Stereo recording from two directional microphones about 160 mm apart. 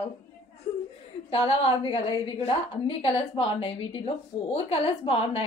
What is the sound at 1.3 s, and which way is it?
A woman's voice, 40° left (ahead or behind).